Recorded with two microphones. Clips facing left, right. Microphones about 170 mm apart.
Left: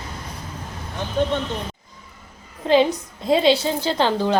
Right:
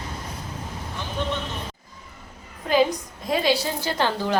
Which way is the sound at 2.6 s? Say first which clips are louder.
Left 3 dB; 25° left (ahead or behind).